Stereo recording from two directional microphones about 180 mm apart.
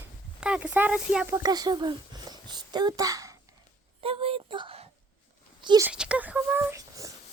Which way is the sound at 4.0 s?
30° right (ahead or behind).